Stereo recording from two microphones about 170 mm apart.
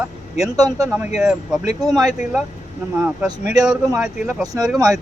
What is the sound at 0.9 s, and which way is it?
Speech, 10° right (ahead or behind).